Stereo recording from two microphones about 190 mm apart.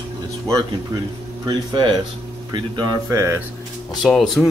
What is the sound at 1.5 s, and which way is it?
Speech, 25° right (ahead or behind).